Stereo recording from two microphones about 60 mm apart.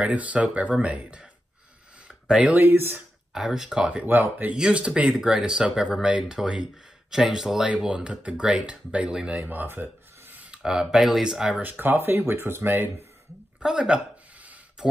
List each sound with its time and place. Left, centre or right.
0.0 s speech: right
2.0 s a sound: centre
2.5 s speech: right
3.3 s speech: centre
4.0 s speech: right
4.6 s speech: centre
9.4 s filing: right
10.5 s speech: centre
11.8 s speech: right
13.6 s speech: centre
14.8 s a sound: centre